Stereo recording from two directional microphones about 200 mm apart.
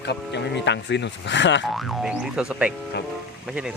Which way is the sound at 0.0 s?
60° left (ahead or behind).